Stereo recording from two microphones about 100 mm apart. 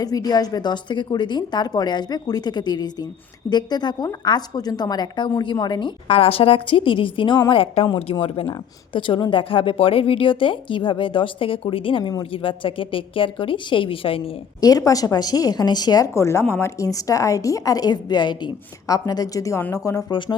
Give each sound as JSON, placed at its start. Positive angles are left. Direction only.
{"t": 0.0, "sound": "a woman's voice", "side_deg": 40}
{"t": 6.1, "sound": "a woman's voice", "side_deg": 75}
{"t": 14.6, "sound": "a woman's voice", "side_deg": 40}
{"t": 16.1, "sound": "a woman's voice", "side_deg": 30}
{"t": 20.1, "sound": "a woman's voice", "side_deg": 55}